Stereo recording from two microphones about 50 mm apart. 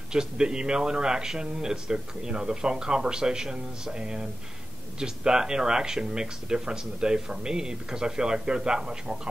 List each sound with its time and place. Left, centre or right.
0.1 s speech: centre